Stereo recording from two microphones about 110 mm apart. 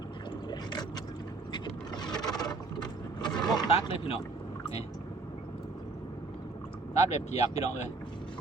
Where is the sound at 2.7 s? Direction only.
40° left (ahead or behind).